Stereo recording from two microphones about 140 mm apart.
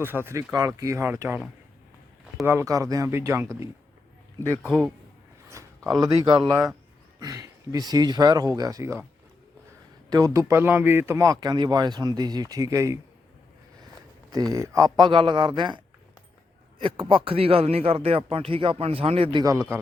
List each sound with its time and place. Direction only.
0.0 s speech: 15° right (ahead or behind)
2.5 s speech: 20° right (ahead or behind)
4.6 s a man's voice: centre (ahead or behind)
5.5 s a sound: 20° right (ahead or behind)
6.0 s speech: 30° right (ahead or behind)
10.1 s speech: 25° right (ahead or behind)
14.3 s speech: 25° right (ahead or behind)
16.8 s speech: 40° right (ahead or behind)
19.4 s speech: 25° right (ahead or behind)